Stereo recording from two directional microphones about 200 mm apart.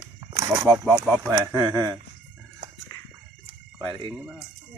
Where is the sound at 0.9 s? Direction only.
5° right (ahead or behind).